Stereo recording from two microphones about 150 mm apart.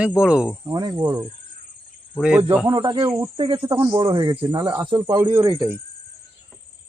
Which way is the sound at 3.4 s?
35° right (ahead or behind).